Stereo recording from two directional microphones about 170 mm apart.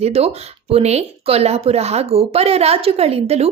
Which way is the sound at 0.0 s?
40° right (ahead or behind).